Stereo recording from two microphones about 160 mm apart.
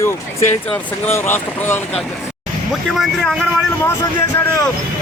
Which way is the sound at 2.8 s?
Centre (ahead or behind).